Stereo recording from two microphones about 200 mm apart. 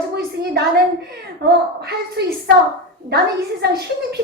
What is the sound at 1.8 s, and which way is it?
Speech, 55° right (ahead or behind).